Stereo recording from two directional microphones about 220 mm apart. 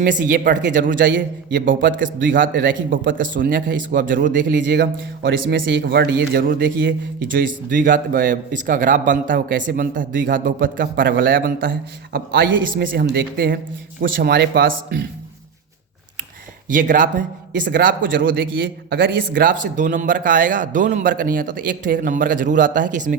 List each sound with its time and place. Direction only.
0.0 s speech: 40° right (ahead or behind)
4.8 s speech: 55° right (ahead or behind)
12.7 s speech: 40° right (ahead or behind)
16.6 s speech: 35° right (ahead or behind)